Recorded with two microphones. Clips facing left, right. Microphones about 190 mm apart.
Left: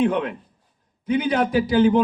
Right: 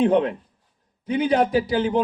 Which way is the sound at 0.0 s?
35° right (ahead or behind).